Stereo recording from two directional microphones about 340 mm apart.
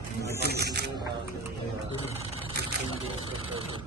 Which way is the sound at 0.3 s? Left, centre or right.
Right.